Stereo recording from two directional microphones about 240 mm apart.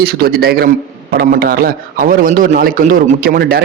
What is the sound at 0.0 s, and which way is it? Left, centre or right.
A man's voice, right.